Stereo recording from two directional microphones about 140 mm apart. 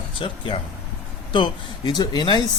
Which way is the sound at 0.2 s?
40° left (ahead or behind).